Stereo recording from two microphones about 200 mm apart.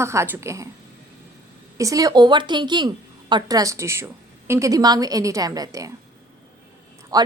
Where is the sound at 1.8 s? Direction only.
15° right (ahead or behind).